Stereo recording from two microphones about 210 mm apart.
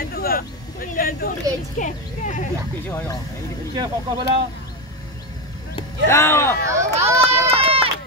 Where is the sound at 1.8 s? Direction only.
35° left (ahead or behind).